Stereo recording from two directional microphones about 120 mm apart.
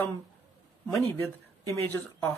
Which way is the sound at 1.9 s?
15° left (ahead or behind).